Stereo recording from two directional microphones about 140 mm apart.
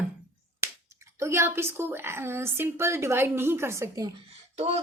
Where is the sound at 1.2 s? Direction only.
20° right (ahead or behind).